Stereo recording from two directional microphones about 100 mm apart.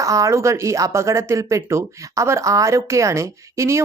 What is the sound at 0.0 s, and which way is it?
Speech, 30° right (ahead or behind).